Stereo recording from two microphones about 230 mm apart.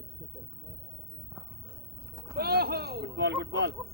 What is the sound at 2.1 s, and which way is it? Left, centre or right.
Pigeon, centre.